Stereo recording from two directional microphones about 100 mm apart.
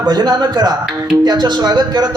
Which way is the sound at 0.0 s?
45° right (ahead or behind).